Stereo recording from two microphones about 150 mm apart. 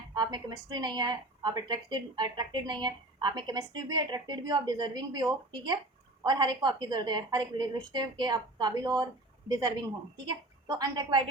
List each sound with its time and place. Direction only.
0.1 s a woman's voice: 30° right (ahead or behind)